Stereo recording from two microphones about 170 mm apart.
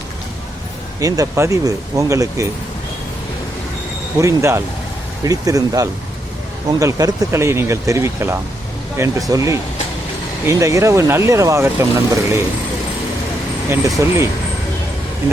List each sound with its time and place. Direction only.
0.9 s speech: 20° right (ahead or behind)
4.2 s speech: 15° right (ahead or behind)
14.0 s speech: 15° right (ahead or behind)